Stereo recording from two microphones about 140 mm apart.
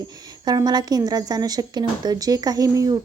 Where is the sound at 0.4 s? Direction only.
30° right (ahead or behind).